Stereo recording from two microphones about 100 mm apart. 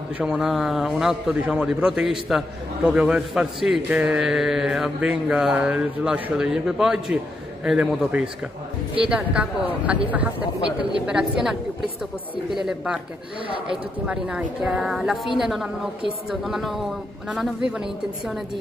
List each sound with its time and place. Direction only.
0.2 s a man's voice: 5° right (ahead or behind)
12.5 s a woman's voice: 5° right (ahead or behind)
14.0 s a woman's voice: 10° right (ahead or behind)